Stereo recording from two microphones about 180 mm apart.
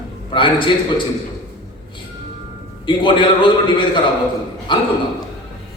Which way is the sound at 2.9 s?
25° left (ahead or behind).